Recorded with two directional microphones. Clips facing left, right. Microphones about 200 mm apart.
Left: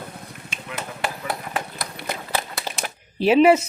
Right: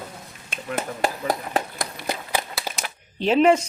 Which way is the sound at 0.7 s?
40° right (ahead or behind).